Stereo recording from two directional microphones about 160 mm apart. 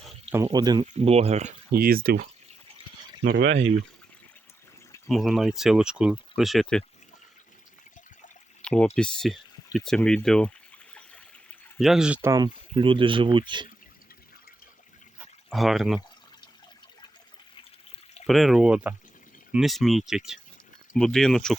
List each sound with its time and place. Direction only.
0.3 s speech: 25° right (ahead or behind)
0.9 s speech: 40° right (ahead or behind)
1.7 s speech: 65° right (ahead or behind)
5.0 s speech: centre (ahead or behind)
8.6 s speech: 5° left (ahead or behind)
11.8 s speech: 5° right (ahead or behind)
12.2 s speech: 25° right (ahead or behind)
15.4 s speech: centre (ahead or behind)
18.3 s speech: centre (ahead or behind)